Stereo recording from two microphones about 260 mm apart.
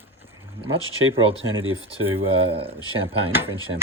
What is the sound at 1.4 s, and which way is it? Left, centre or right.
Speech, right.